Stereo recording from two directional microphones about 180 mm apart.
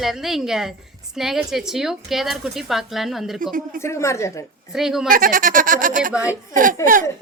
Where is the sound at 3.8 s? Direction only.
15° left (ahead or behind).